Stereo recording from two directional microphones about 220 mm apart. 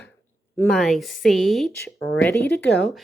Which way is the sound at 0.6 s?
5° left (ahead or behind).